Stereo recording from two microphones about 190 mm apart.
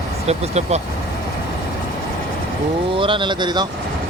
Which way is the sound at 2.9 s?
25° right (ahead or behind).